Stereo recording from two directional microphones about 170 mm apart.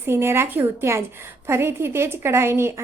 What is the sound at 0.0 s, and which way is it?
A woman's voice, 15° right (ahead or behind).